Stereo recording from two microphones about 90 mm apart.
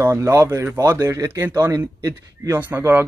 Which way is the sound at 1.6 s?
40° right (ahead or behind).